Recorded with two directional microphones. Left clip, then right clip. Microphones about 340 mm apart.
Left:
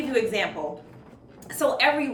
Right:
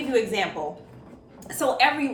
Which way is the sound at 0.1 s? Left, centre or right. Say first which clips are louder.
Right 1 dB; centre.